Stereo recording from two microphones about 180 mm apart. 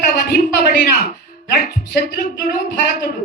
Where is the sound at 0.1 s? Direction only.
60° left (ahead or behind).